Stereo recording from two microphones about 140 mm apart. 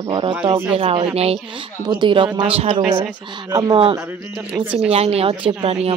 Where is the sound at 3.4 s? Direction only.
30° right (ahead or behind).